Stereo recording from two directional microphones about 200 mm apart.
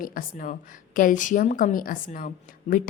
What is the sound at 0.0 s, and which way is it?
A woman's voice, 45° left (ahead or behind).